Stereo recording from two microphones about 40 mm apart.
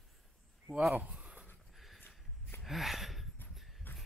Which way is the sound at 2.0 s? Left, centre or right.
Left.